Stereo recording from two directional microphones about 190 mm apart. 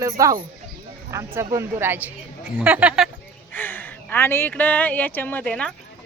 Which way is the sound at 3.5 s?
10° left (ahead or behind).